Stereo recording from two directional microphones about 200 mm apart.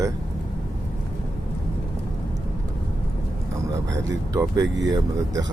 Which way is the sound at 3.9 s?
15° right (ahead or behind).